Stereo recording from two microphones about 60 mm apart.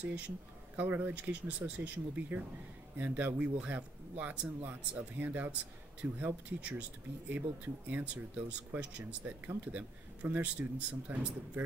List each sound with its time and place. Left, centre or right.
0.7 s speech: right